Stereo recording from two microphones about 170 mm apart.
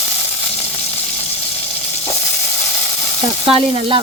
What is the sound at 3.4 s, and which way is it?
Frying, 30° right (ahead or behind).